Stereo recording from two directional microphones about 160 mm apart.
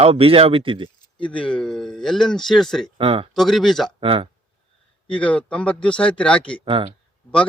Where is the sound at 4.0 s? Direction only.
35° right (ahead or behind).